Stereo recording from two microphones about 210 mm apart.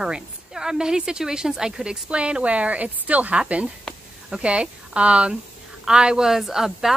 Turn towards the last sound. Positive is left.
turn(degrees=0)  # may be behind; listen again after turning